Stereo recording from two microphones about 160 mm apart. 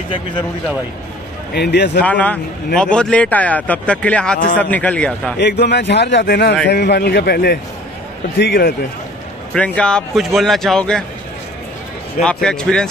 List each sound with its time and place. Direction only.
1.5 s speech: 90° left
2.0 s speech: 10° left (ahead or behind)
5.4 s a man's voice: 90° left; by 8.7 s 75° left (ahead or behind)
9.5 s speech: 5° left (ahead or behind)
12.2 s speech: 5° left (ahead or behind)